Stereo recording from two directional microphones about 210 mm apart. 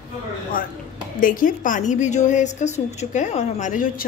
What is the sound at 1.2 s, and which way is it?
A woman's voice, 40° left (ahead or behind).